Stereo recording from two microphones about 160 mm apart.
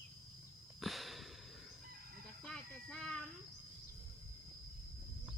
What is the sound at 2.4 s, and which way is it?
Child singing, 5° left (ahead or behind).